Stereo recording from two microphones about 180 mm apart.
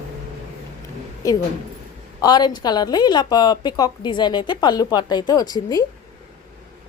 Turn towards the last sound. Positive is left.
turn(degrees=20)  # may be behind; listen again after turning